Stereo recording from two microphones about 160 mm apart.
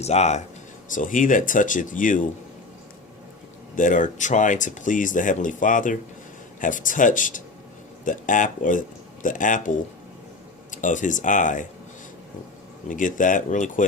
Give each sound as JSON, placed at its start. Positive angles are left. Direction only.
{"t": 0.0, "sound": "speech", "side_deg": 45}
{"t": 0.9, "sound": "speech", "side_deg": 55}
{"t": 3.8, "sound": "speech", "side_deg": 55}
{"t": 12.9, "sound": "speech", "side_deg": 55}